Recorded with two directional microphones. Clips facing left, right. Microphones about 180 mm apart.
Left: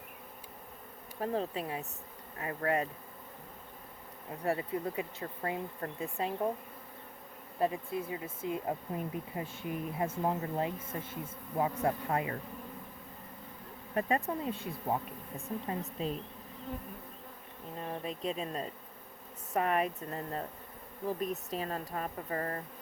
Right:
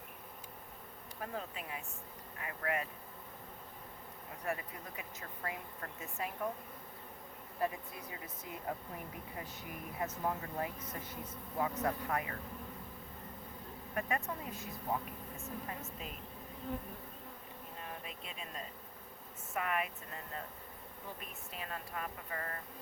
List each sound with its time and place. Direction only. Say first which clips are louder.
1.2 s speech: left 9 dB; 30° left (ahead or behind)
4.4 s speech: left 8 dB; 30° left (ahead or behind)
7.6 s speech: left 6 dB; 25° left (ahead or behind)
13.9 s speech: left 6 dB; 30° left (ahead or behind)
17.7 s speech: left 10 dB; 35° left (ahead or behind)